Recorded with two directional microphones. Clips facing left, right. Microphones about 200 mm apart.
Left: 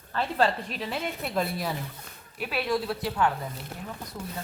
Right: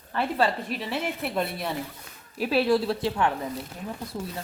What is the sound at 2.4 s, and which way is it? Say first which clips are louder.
Speech: right 6 dB; 30° right (ahead or behind).